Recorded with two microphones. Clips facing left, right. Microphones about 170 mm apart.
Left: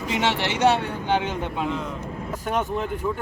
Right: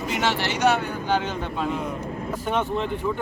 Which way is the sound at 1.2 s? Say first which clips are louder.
Left 1 dB; 15° left (ahead or behind).